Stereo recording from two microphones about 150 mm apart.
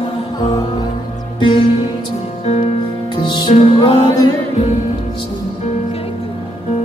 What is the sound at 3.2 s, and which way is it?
Music, 30° left (ahead or behind).